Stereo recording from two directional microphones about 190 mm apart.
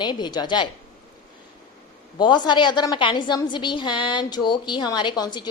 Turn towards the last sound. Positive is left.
turn(degrees=20)  # may be behind; listen again after turning